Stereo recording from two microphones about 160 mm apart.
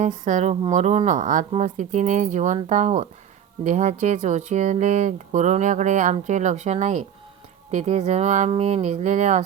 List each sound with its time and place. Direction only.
0.0 s speech: 50° right (ahead or behind)